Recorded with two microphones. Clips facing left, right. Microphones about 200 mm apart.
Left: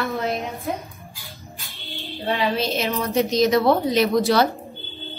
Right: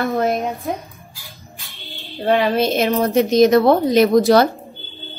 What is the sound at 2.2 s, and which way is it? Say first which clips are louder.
A woman's voice: right 7 dB; 50° right (ahead or behind).